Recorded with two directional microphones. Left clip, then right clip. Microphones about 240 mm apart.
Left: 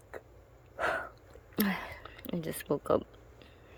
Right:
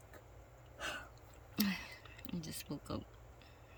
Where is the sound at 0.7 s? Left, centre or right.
Centre.